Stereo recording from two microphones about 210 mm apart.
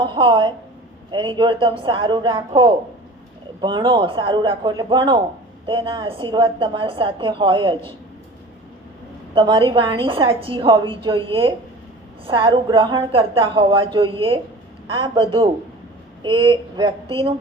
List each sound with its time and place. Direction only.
0.0 s a woman's voice: 25° right (ahead or behind)
9.3 s a woman's voice: 25° right (ahead or behind)